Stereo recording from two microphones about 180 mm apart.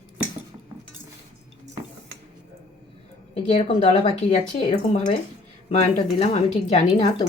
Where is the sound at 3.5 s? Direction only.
35° left (ahead or behind).